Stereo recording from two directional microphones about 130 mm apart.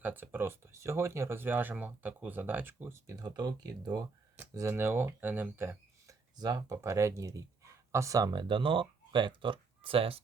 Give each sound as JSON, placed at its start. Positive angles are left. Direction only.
{"t": 0.0, "sound": "speech", "side_deg": -15}
{"t": 4.5, "sound": "speech", "side_deg": -20}
{"t": 6.4, "sound": "speech", "side_deg": -30}